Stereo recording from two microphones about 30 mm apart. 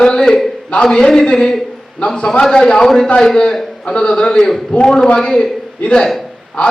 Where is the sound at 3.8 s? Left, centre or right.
Left.